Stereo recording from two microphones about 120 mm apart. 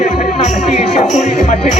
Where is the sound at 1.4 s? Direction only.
90° left.